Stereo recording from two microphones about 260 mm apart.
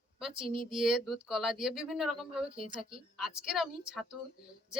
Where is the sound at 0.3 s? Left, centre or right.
Centre.